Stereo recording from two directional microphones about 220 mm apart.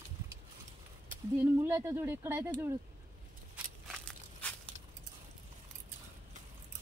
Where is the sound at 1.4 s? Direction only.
10° right (ahead or behind).